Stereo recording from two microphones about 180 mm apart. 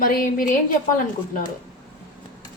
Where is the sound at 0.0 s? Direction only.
50° left (ahead or behind).